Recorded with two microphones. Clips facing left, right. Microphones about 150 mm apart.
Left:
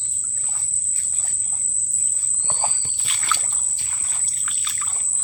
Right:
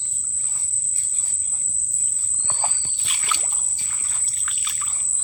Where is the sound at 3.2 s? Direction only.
15° right (ahead or behind).